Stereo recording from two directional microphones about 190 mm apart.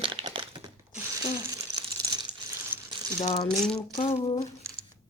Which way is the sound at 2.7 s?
50° right (ahead or behind).